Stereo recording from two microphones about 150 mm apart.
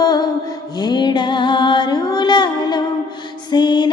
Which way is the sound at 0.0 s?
25° left (ahead or behind).